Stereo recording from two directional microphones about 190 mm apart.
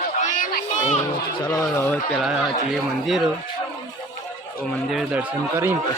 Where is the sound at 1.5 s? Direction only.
15° left (ahead or behind).